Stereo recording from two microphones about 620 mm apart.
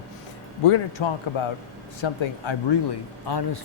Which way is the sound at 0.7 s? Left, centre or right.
Left.